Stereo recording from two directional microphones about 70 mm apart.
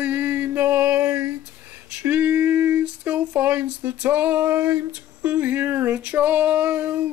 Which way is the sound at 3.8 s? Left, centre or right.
Right.